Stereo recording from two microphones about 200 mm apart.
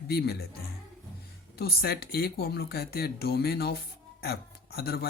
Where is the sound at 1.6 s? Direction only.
50° left (ahead or behind).